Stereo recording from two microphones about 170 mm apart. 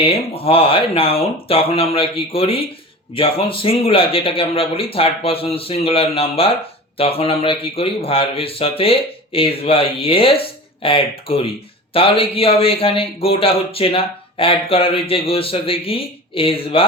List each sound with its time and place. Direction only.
0.0 s a man's voice: 35° left (ahead or behind)